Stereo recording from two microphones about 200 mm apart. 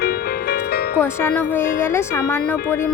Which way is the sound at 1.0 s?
10° left (ahead or behind).